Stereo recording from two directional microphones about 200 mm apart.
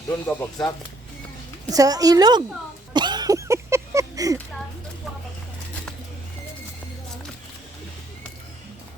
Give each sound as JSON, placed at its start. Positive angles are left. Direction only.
{"t": 0.1, "sound": "speech", "side_deg": 15}
{"t": 1.7, "sound": "a woman's voice", "side_deg": -20}
{"t": 2.9, "sound": "a sound", "side_deg": -20}